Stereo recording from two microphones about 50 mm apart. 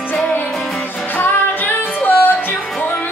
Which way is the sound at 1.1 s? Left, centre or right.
Left.